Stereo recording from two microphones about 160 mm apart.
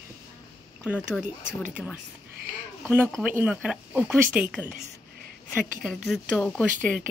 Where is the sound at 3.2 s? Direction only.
10° right (ahead or behind).